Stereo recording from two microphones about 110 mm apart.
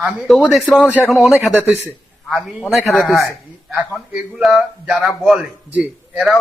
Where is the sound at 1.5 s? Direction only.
20° right (ahead or behind).